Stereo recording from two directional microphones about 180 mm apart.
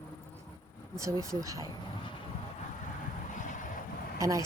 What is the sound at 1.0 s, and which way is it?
Speech, 15° right (ahead or behind).